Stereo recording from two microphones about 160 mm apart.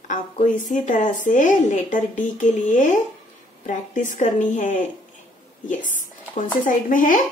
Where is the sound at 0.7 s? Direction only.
50° left (ahead or behind).